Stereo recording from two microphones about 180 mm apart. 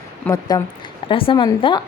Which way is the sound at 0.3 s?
20° left (ahead or behind).